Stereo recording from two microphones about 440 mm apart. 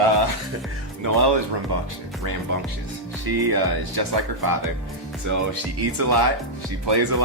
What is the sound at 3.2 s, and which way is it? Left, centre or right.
Speech, right.